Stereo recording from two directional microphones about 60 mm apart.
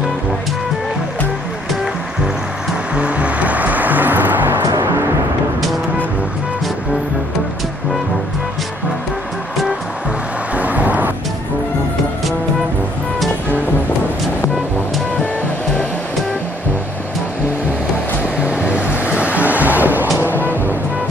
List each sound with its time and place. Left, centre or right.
2.9 s music: right
4.8 s music: right
10.5 s vehicle: right
18.4 s vehicle: right
20.2 s music: right